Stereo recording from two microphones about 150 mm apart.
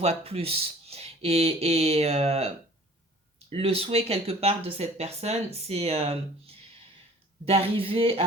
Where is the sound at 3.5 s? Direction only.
40° right (ahead or behind).